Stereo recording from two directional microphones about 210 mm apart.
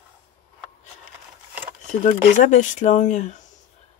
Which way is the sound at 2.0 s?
35° left (ahead or behind).